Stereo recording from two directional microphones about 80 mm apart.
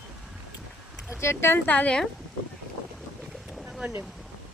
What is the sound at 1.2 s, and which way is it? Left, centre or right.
Speech, left.